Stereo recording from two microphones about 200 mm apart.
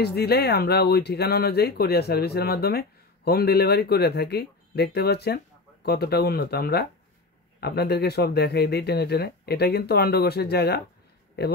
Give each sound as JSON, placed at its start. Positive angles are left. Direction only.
{"t": 0.0, "sound": "speech", "side_deg": 55}